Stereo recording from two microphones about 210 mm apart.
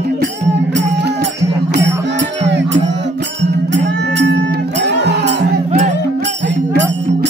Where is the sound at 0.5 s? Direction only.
55° right (ahead or behind).